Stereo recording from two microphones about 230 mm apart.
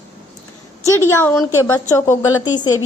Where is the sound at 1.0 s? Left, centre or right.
Centre.